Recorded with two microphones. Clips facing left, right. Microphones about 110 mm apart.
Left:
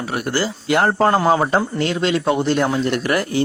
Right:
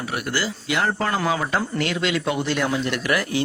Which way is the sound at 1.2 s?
35° left (ahead or behind).